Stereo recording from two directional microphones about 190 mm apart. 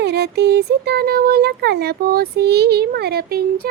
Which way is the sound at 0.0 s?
60° right (ahead or behind).